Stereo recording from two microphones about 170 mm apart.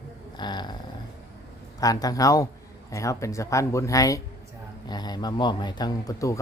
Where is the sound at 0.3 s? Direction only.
25° left (ahead or behind).